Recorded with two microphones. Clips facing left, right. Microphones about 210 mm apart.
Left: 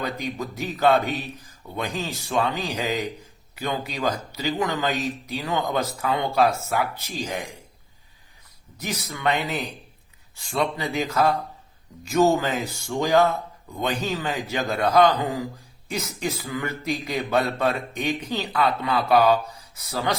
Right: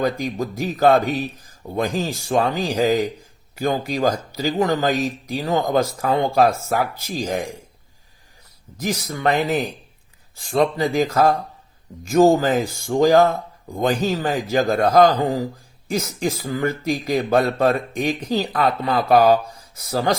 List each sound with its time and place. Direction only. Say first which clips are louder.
0.0 s speech: right 7 dB; 45° right (ahead or behind)
8.8 s speech: right 5 dB; 45° right (ahead or behind)
13.9 s a man's voice: right 6 dB; 35° right (ahead or behind)
14.5 s a man's voice: right 5 dB; 45° right (ahead or behind)